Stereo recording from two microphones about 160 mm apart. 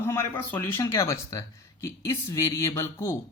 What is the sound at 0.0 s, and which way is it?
Speech, 15° left (ahead or behind).